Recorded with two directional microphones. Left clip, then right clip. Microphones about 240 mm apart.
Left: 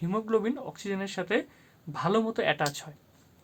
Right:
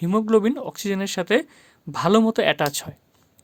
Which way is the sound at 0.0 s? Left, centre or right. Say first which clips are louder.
Right 9 dB; right.